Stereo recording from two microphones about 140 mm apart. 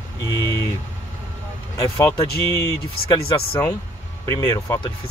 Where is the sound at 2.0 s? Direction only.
20° left (ahead or behind).